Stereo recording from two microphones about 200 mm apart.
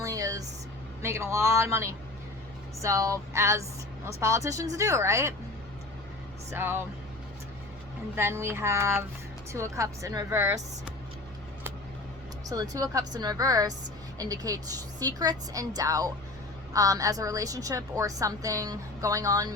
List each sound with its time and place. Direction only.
0.0 s a sound: 15° right (ahead or behind)
1.0 s a woman's voice: 15° right (ahead or behind)
6.5 s a woman's voice: 10° right (ahead or behind)
8.1 s a woman's voice: 10° right (ahead or behind)
12.5 s a woman's voice: 20° right (ahead or behind)